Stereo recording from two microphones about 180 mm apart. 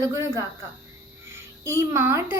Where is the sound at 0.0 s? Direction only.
15° right (ahead or behind).